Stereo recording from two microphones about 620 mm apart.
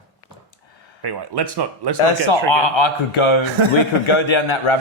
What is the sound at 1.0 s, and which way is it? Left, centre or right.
Speech, right.